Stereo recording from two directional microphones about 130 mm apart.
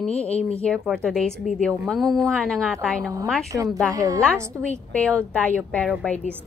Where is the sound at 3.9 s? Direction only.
25° right (ahead or behind).